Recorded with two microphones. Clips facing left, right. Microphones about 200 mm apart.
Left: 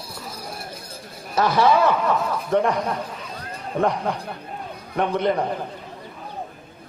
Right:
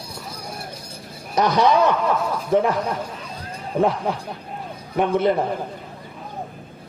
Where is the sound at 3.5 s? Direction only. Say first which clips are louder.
Right 2 dB; 5° right (ahead or behind).